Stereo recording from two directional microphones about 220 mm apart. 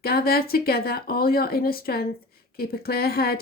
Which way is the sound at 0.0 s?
45° left (ahead or behind).